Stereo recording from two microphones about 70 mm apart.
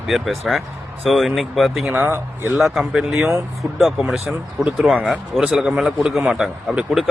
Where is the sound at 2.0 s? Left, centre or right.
Right.